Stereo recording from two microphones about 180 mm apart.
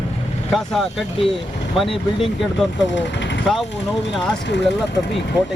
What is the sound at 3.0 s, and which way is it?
Vehicle, 80° left.